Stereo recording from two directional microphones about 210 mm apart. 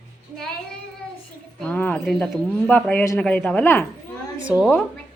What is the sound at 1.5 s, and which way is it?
Speech, 5° left (ahead or behind).